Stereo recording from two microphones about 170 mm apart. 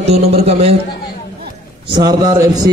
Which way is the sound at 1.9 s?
20° right (ahead or behind).